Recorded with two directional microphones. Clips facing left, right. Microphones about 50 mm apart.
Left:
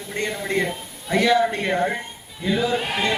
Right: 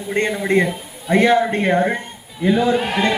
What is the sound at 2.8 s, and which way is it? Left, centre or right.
Speech, centre.